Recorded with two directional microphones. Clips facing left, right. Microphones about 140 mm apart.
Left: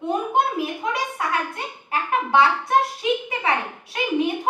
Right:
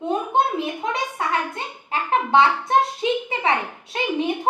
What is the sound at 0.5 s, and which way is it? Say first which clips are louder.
A child's voice: even; 25° right (ahead or behind).